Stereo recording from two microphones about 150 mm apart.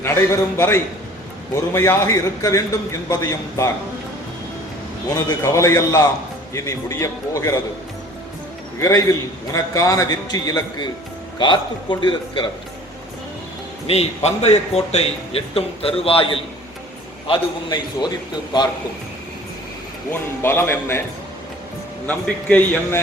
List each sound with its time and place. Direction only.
0.0 s a man's voice: 15° left (ahead or behind)
5.1 s a man's voice: 20° left (ahead or behind)
8.8 s a man's voice: 20° left (ahead or behind)
13.8 s a man's voice: 45° left (ahead or behind)
20.1 s a man's voice: 15° left (ahead or behind)
22.0 s a man's voice: 10° left (ahead or behind)